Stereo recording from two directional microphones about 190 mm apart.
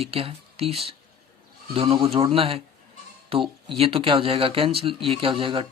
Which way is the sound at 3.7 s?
30° right (ahead or behind).